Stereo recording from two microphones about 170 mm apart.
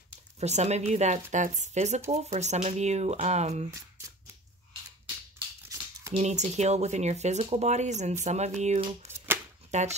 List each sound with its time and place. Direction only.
0.4 s speech: 40° right (ahead or behind)
6.1 s speech: 40° right (ahead or behind)